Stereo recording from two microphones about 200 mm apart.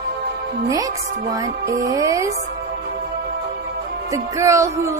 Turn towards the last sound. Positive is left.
turn(degrees=-15)  # may be behind; listen again after turning